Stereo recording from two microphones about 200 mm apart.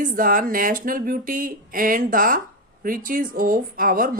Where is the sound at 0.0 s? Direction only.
45° right (ahead or behind).